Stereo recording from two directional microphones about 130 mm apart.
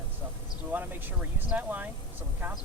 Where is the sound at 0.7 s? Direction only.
15° right (ahead or behind).